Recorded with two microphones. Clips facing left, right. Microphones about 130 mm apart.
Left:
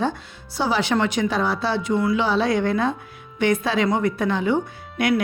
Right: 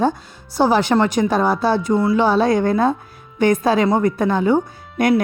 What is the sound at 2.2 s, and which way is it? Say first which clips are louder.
A woman's voice: right 5 dB; 45° right (ahead or behind).